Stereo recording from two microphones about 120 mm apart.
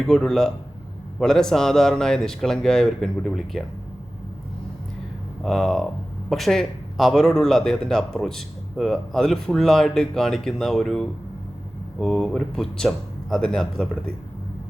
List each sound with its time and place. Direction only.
0.0 s speech: 5° left (ahead or behind)
5.4 s speech: centre (ahead or behind)